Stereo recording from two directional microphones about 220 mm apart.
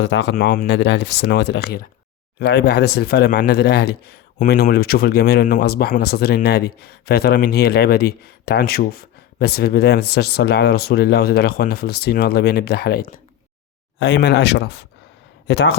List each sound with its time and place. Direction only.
0.0 s speech: 55° left (ahead or behind)